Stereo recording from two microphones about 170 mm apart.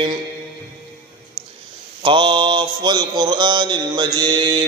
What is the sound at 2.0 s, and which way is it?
Mantra, 30° right (ahead or behind).